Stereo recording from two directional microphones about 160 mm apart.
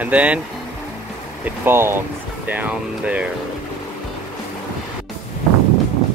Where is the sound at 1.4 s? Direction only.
15° right (ahead or behind).